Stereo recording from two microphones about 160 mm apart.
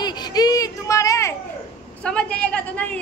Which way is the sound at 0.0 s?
25° left (ahead or behind).